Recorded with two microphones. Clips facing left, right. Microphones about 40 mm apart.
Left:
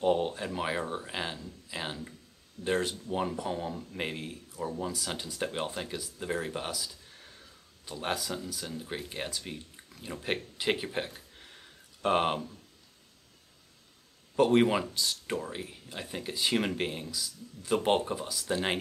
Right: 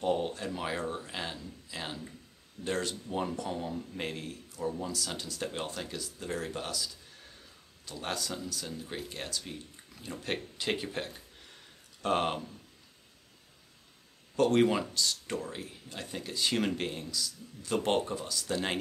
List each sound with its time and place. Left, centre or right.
0.0 s speech: centre
14.3 s speech: centre